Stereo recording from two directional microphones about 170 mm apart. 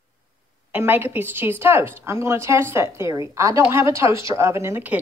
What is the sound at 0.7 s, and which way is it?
Speech, 10° right (ahead or behind).